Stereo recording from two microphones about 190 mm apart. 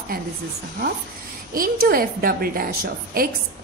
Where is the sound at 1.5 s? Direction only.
50° right (ahead or behind).